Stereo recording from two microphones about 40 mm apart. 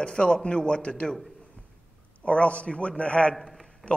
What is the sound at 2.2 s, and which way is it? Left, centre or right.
Speech, left.